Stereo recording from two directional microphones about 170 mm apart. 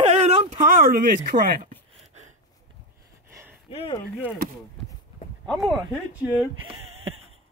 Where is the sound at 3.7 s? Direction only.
35° left (ahead or behind).